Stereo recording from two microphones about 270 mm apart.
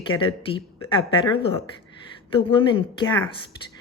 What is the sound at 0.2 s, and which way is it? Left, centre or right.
A woman's voice, centre.